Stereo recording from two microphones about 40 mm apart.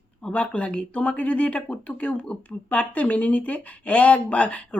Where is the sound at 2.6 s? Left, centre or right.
Left.